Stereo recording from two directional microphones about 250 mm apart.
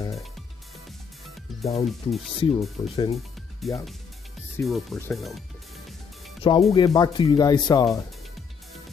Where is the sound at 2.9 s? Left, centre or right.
Left.